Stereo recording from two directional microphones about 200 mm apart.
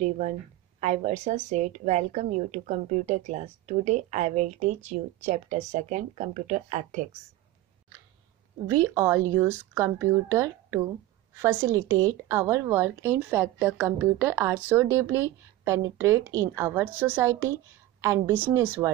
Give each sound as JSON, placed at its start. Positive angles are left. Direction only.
{"t": 0.7, "sound": "a woman's voice", "side_deg": -35}
{"t": 8.8, "sound": "a woman's voice", "side_deg": -15}